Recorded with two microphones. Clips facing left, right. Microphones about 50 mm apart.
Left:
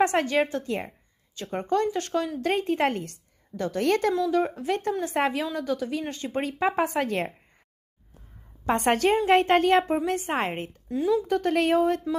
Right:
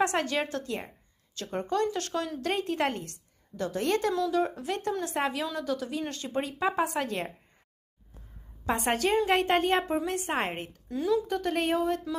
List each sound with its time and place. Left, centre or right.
0.0 s a woman's voice: left
4.1 s a woman's voice: left
8.6 s a woman's voice: left